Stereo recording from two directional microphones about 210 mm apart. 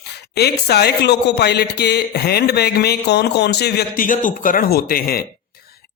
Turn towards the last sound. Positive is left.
turn(degrees=45)  # may be behind; listen again after turning